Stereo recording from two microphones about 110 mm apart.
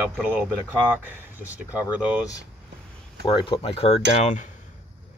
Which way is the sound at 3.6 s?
65° left (ahead or behind).